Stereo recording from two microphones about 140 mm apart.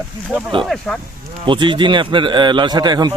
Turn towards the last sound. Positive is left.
turn(degrees=-30)  # may be behind; listen again after turning